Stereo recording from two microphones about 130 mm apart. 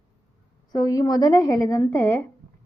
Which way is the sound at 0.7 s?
30° left (ahead or behind).